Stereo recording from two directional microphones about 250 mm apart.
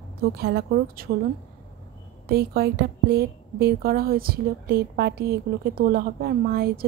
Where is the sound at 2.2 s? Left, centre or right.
Right.